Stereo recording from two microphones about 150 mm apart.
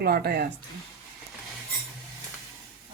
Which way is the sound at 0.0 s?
90° right.